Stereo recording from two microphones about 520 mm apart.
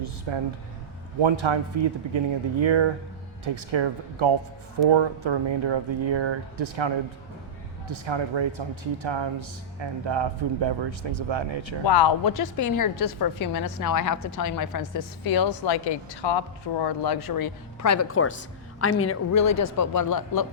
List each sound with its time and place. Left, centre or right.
0.0 s speech: right
11.9 s a woman's voice: left